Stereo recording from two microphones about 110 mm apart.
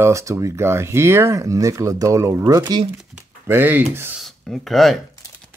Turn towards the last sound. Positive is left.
turn(degrees=0)  # may be behind; listen again after turning